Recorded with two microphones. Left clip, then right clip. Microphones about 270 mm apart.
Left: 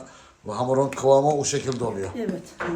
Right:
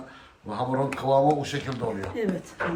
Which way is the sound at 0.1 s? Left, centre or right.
Centre.